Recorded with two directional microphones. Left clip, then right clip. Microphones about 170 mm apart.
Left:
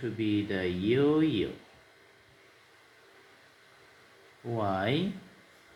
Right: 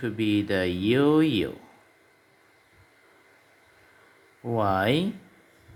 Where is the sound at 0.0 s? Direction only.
65° right (ahead or behind).